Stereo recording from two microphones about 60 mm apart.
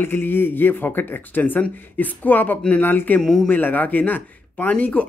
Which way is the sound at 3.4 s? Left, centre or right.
Left.